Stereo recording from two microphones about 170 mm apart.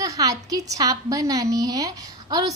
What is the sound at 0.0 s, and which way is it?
A woman's voice, 20° right (ahead or behind).